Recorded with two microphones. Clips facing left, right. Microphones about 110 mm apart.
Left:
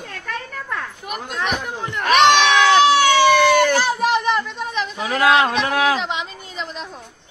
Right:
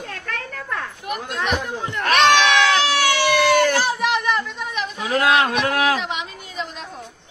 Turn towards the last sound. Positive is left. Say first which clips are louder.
# left 1 dB
turn(degrees=25)  # may be behind; listen again after turning